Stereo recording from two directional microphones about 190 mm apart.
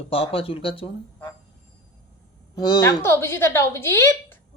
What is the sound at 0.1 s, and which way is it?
Speech, 30° left (ahead or behind).